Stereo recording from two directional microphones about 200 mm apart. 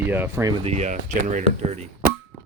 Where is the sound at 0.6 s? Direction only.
35° right (ahead or behind).